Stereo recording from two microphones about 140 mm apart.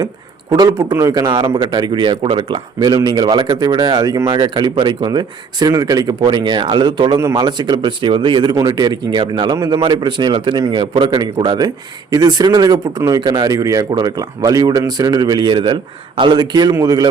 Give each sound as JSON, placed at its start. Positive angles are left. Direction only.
{"t": 0.5, "sound": "speech", "side_deg": -25}